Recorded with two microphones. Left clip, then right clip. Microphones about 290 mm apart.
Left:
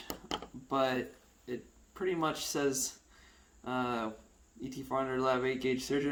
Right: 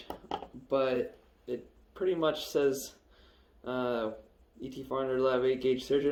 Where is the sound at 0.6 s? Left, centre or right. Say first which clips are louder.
Right 2 dB; left.